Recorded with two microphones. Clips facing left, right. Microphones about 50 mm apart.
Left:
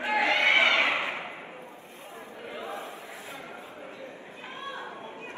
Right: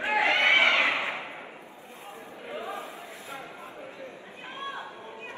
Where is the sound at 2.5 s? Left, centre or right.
Right.